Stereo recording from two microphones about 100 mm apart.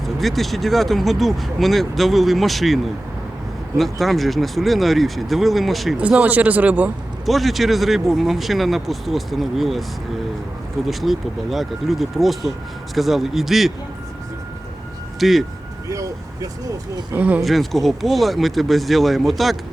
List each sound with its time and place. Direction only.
0.0 s speech: centre (ahead or behind)
6.0 s speech: 15° right (ahead or behind)
7.3 s speech: centre (ahead or behind)
10.8 s speech: centre (ahead or behind)
15.2 s speech: centre (ahead or behind)
15.9 s speech: 35° right (ahead or behind)
17.2 s speech: 15° right (ahead or behind)
17.4 s speech: centre (ahead or behind)